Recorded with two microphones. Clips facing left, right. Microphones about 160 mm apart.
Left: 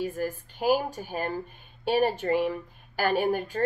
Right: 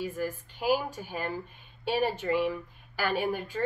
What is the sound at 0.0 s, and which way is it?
Speech, 45° left (ahead or behind).